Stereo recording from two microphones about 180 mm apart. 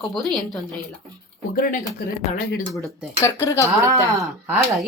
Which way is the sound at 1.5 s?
55° left (ahead or behind).